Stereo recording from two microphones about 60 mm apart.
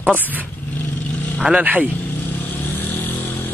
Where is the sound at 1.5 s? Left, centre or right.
Right.